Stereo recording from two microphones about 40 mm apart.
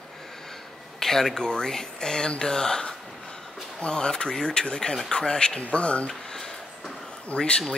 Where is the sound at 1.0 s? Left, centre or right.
Centre; by 6.1 s left.